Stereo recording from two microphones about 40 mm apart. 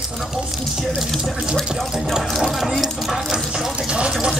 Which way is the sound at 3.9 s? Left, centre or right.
Right.